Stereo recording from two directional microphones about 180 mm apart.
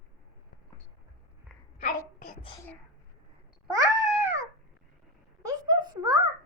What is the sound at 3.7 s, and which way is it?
Cat, 20° right (ahead or behind).